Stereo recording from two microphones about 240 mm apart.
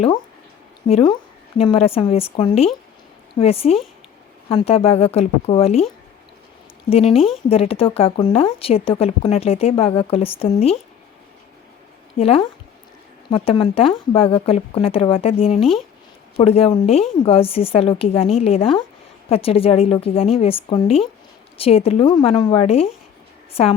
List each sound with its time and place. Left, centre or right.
0.9 s speech: left
6.9 s speech: left
12.1 s speech: left